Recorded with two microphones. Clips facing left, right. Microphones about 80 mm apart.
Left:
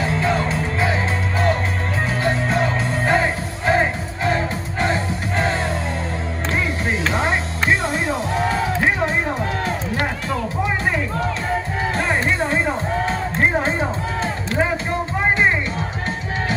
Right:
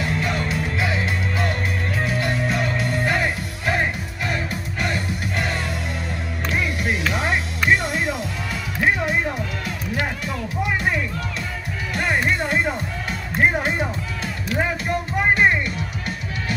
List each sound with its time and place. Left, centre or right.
0.0 s music: left
2.2 s music: left
4.8 s music: left
7.1 s music: left
12.0 s music: left